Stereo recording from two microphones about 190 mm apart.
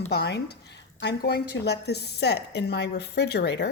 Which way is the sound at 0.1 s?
60° left (ahead or behind).